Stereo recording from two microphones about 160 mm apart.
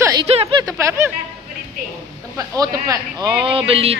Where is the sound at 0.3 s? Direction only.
40° right (ahead or behind).